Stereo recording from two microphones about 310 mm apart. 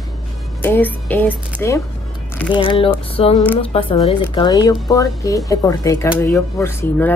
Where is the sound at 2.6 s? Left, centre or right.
Centre.